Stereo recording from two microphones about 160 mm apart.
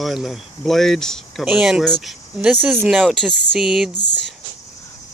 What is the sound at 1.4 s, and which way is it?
Speech, 10° right (ahead or behind).